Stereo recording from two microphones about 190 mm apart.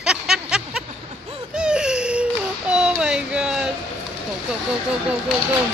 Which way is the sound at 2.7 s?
5° right (ahead or behind).